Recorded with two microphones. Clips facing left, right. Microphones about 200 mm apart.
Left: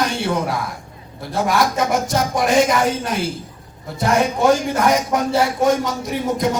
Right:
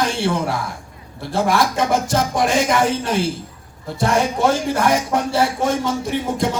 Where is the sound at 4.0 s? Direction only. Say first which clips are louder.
Left 1 dB; 30° right (ahead or behind).